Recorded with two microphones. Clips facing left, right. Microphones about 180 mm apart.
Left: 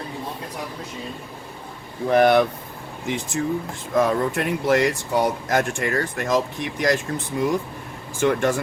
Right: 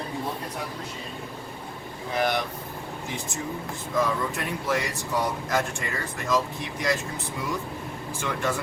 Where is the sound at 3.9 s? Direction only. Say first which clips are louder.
Left 6 dB; 60° left (ahead or behind).